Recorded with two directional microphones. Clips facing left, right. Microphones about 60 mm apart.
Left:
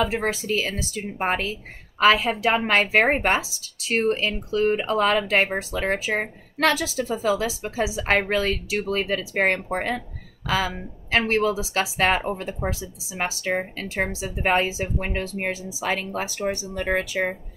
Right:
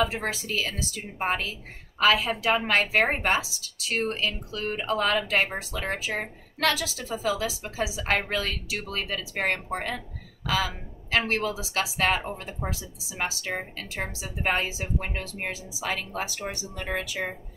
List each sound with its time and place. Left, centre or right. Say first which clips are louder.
0.2 s speech: left 5 dB; left
13.3 s speech: left 6 dB; left